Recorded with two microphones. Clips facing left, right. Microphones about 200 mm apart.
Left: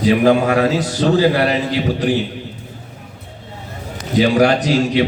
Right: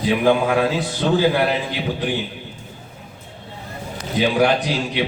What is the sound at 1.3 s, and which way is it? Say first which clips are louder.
Speech: left 3 dB; 90° left.